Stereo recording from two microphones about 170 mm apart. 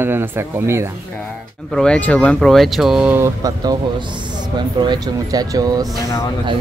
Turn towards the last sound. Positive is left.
turn(degrees=20)  # may be behind; listen again after turning